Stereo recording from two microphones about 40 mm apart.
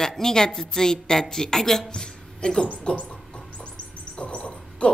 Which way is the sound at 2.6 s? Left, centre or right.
Left.